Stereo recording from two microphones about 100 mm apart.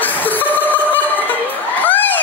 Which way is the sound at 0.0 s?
20° left (ahead or behind).